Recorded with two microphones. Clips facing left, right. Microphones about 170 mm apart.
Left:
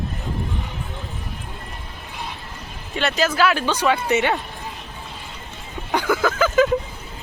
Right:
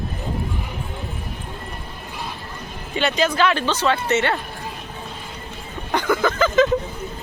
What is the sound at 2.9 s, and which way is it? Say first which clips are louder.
Speech: right 1 dB; centre (ahead or behind).